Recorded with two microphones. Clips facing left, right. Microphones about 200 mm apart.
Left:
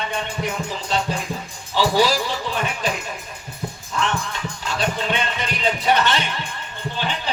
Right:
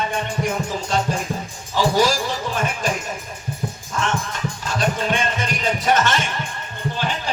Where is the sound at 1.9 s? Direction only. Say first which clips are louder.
Even; 45° right (ahead or behind).